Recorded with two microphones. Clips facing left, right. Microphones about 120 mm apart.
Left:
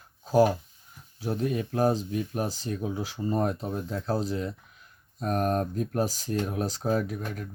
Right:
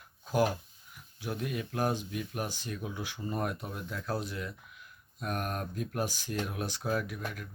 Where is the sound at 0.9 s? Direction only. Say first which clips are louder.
Left 6 dB; 35° left (ahead or behind).